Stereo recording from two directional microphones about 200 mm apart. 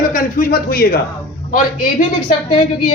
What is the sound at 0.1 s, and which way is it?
A man's voice, 45° left (ahead or behind).